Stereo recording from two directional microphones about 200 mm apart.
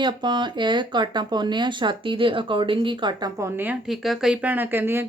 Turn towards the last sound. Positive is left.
turn(degrees=-10)  # may be behind; listen again after turning